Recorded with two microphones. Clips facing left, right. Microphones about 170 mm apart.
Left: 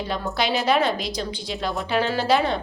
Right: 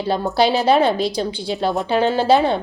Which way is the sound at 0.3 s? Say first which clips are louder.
Right 6 dB; 35° right (ahead or behind).